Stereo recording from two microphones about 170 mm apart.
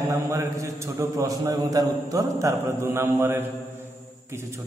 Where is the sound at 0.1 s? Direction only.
20° right (ahead or behind).